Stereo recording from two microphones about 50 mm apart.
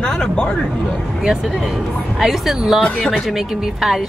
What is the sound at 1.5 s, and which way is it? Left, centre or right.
Speech, centre.